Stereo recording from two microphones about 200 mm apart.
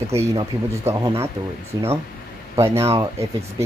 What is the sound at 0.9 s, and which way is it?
Speech, 15° right (ahead or behind).